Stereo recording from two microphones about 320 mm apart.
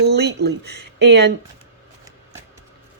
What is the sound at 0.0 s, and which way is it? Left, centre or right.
Speech, right.